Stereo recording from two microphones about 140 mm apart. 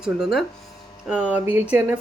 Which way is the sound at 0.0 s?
5° right (ahead or behind).